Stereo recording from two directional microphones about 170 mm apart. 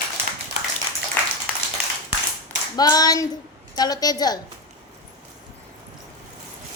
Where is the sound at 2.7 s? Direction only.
25° left (ahead or behind).